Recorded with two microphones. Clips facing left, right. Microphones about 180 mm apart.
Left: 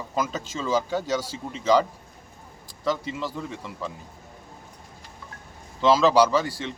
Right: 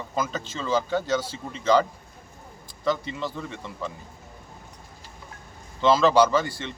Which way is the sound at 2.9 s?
5° left (ahead or behind).